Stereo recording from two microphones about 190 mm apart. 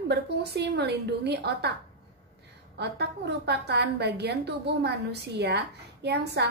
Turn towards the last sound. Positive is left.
turn(degrees=-60)  # may be behind; listen again after turning